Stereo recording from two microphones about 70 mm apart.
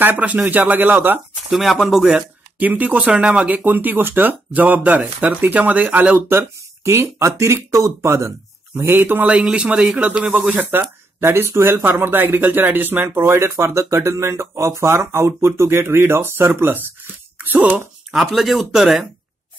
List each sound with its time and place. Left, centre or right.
0.0 s speech: right
1.5 s speech: centre
2.6 s speech: right
3.0 s speech: centre; by 8.3 s right
8.7 s speech: right
9.2 s speech: centre
13.2 s speech: right
17.4 s a sound: right
18.1 s speech: centre